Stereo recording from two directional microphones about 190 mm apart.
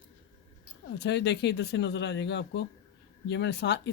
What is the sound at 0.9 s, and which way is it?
Speech, 65° left (ahead or behind).